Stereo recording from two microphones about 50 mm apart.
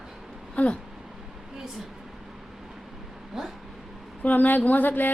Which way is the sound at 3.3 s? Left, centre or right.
Centre.